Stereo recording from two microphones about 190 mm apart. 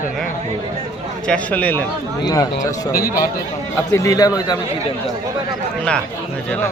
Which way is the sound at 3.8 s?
15° left (ahead or behind).